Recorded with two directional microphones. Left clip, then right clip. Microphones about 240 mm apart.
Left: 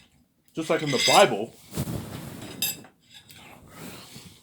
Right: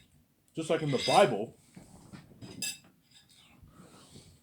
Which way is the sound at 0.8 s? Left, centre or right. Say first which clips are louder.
Left 9 dB; left.